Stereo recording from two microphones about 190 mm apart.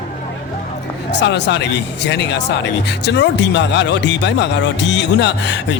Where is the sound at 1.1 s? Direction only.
65° left (ahead or behind).